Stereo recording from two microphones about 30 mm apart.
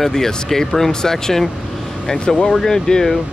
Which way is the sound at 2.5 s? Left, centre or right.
Centre.